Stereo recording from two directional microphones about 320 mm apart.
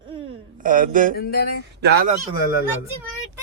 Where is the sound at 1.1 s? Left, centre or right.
Left.